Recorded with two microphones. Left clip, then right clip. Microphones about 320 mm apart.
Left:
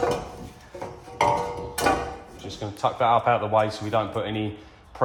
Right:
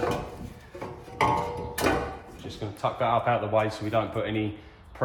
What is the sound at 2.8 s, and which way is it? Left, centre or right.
Speech, centre.